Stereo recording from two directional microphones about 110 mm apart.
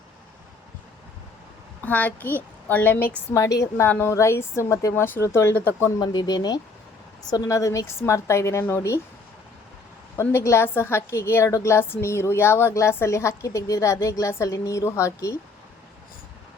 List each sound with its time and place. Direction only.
1.8 s a child's voice: 15° left (ahead or behind)
3.3 s a woman's voice: 30° left (ahead or behind)
6.0 s a woman's voice: 40° left (ahead or behind); by 9.0 s 20° left (ahead or behind)
10.2 s a woman's voice: 25° left (ahead or behind)